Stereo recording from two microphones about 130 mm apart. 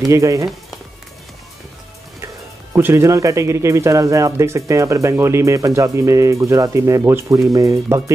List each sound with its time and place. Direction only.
0.1 s speech: 25° right (ahead or behind)
2.2 s speech: 20° right (ahead or behind)